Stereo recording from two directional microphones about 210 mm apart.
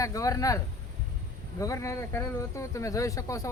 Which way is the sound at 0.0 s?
15° left (ahead or behind).